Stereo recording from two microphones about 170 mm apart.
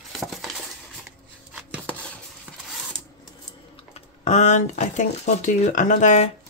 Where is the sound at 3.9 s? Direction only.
40° left (ahead or behind).